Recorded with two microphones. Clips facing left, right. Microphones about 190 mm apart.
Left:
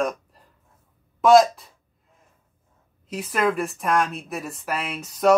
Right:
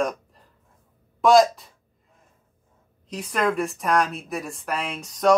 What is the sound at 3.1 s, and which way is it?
Speech, 5° left (ahead or behind).